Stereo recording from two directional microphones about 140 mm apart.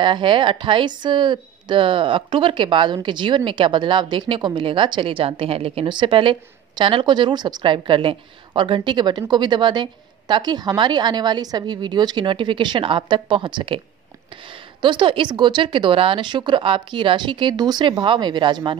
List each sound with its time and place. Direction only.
0.0 s a woman's voice: 35° right (ahead or behind)
14.8 s a woman's voice: 35° right (ahead or behind)